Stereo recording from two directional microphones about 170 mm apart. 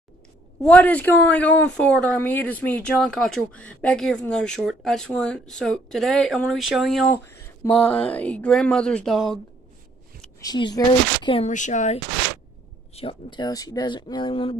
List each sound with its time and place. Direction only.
0.6 s speech: 10° left (ahead or behind)
7.2 s speech: 10° left (ahead or behind)
10.4 s speech: 25° left (ahead or behind)
11.4 s speech: 45° left (ahead or behind)
12.9 s speech: 30° left (ahead or behind)